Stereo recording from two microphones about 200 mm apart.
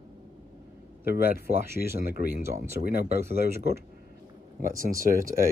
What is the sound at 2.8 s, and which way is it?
Speech, 50° left (ahead or behind).